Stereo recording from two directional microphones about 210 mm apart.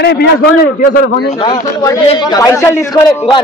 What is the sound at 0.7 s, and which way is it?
Speech, 40° left (ahead or behind).